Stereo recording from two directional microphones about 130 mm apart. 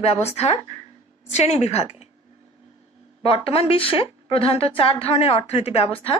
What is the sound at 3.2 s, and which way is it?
Speech, 45° left (ahead or behind).